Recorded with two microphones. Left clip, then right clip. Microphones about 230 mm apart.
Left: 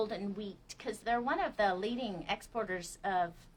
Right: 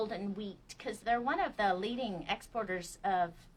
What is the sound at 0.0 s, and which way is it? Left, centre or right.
A woman's voice, centre.